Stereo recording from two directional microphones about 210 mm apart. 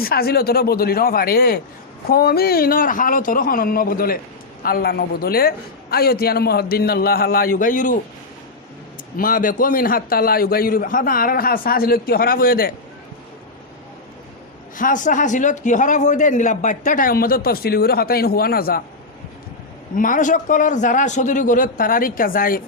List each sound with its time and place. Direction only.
0.0 s a man's voice: 45° left (ahead or behind)
9.1 s a man's voice: 40° left (ahead or behind)
14.8 s speech: 40° left (ahead or behind)
20.0 s speech: 40° left (ahead or behind)